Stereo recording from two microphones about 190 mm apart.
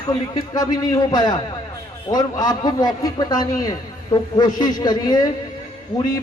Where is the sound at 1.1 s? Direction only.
20° left (ahead or behind).